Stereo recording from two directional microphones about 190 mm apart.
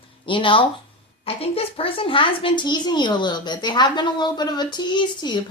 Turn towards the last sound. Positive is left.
turn(degrees=25)  # may be behind; listen again after turning